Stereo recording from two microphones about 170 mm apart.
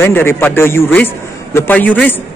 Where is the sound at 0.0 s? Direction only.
15° left (ahead or behind).